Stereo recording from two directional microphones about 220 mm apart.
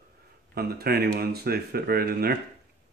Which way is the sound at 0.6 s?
45° right (ahead or behind).